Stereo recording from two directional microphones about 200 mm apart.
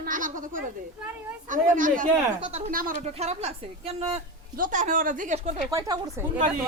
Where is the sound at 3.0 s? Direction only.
30° right (ahead or behind).